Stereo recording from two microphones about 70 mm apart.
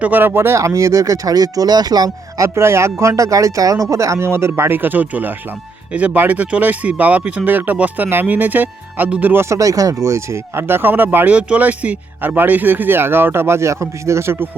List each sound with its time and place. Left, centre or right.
0.0 s speech: right
2.4 s speech: right
9.5 s speech: right